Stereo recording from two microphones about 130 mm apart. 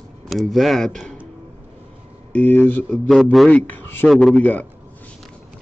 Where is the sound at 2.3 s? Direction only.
15° left (ahead or behind).